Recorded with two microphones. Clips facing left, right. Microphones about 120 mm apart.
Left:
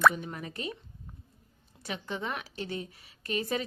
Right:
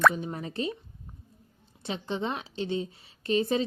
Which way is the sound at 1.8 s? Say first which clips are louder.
Right 4 dB; 25° right (ahead or behind).